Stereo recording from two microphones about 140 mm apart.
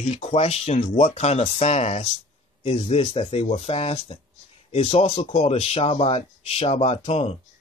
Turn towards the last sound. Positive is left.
turn(degrees=45)  # may be behind; listen again after turning